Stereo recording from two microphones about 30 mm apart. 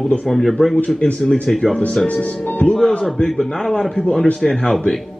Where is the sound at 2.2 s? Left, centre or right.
Left.